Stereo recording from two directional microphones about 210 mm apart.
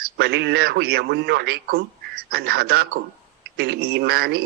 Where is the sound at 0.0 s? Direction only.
50° right (ahead or behind).